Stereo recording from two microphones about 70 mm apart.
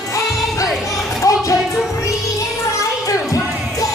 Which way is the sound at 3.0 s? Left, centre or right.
Left.